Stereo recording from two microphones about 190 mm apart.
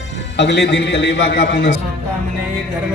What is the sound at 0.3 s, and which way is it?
A man's voice, 65° left (ahead or behind).